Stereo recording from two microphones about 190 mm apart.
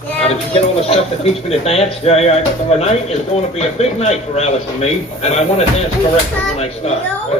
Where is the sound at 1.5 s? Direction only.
35° left (ahead or behind).